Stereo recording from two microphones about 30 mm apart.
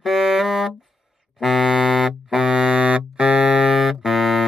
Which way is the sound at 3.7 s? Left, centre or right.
Centre.